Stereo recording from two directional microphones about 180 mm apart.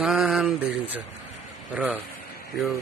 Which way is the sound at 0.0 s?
Centre (ahead or behind).